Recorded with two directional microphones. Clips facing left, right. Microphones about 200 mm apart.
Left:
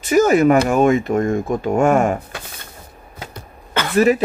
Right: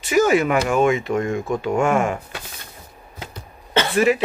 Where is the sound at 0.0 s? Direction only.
45° left (ahead or behind).